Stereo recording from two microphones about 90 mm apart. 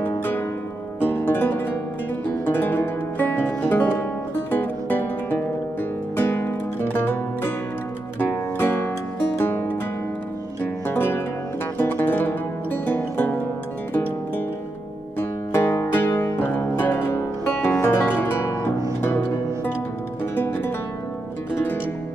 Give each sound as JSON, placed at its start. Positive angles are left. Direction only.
{"t": 0.0, "sound": "music", "side_deg": 20}
{"t": 10.9, "sound": "music", "side_deg": 25}
{"t": 15.1, "sound": "music", "side_deg": 25}